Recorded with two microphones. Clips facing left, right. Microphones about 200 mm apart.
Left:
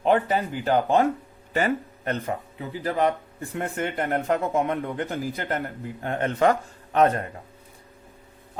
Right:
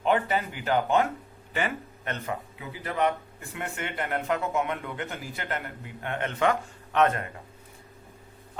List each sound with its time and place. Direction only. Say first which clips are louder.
0.0 s speech: left 4 dB; 35° left (ahead or behind)